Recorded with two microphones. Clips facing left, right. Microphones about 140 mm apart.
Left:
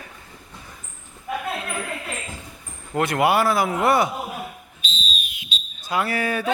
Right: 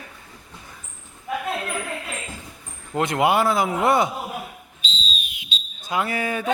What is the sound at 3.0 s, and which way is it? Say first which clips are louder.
Speech: even; 20° right (ahead or behind).